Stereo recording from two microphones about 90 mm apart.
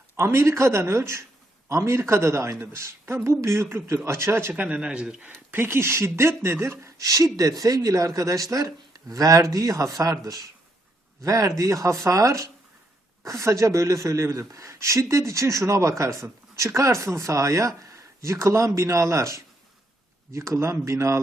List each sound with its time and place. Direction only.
0.2 s speech: 30° right (ahead or behind); by 5.3 s 10° right (ahead or behind)
5.5 s speech: 25° right (ahead or behind)
11.2 s speech: 35° right (ahead or behind)